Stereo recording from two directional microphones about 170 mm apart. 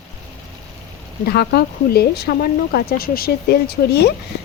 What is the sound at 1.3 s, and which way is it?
A woman's voice, 65° left (ahead or behind).